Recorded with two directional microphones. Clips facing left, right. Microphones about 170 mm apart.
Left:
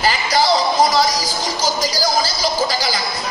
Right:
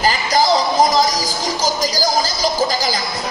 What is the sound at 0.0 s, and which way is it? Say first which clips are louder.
Music: right 1 dB; 40° right (ahead or behind).